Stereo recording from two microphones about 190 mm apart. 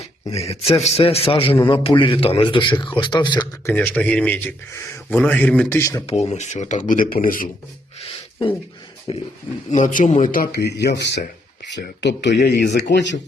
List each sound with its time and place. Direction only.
0.4 s a man's voice: 35° left (ahead or behind)
3.7 s a man's voice: 10° left (ahead or behind)
6.1 s speech: 35° left (ahead or behind)
8.0 s a sound: 30° left (ahead or behind)
9.1 s a man's voice: 30° left (ahead or behind)
9.7 s speech: 40° left (ahead or behind); by 13.1 s 65° left (ahead or behind)